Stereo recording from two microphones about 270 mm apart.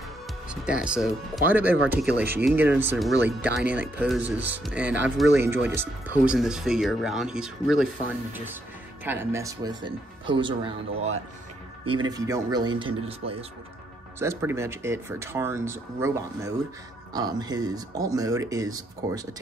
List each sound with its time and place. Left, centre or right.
0.5 s speech: centre; by 13.5 s right
14.2 s speech: centre